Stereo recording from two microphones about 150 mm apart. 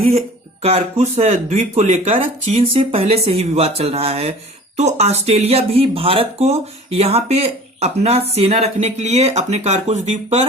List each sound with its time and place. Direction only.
0.6 s speech: 45° right (ahead or behind)